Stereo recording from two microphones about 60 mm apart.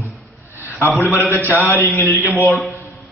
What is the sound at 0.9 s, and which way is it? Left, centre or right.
A man's voice, left.